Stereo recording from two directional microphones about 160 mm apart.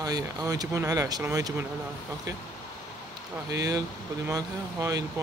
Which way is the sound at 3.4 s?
20° right (ahead or behind).